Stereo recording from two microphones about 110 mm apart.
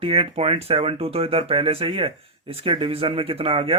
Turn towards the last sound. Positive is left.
turn(degrees=-55)  # may be behind; listen again after turning